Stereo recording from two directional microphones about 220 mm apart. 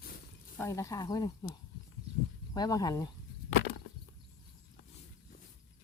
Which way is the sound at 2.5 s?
15° left (ahead or behind).